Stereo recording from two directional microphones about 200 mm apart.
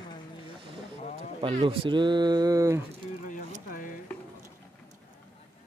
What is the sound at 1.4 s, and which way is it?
Speech, 25° right (ahead or behind).